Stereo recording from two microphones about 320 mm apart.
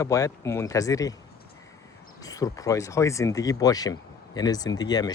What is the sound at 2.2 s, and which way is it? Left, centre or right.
Speech, centre.